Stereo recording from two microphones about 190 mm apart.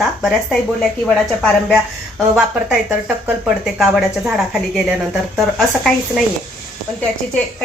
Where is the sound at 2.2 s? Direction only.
5° right (ahead or behind).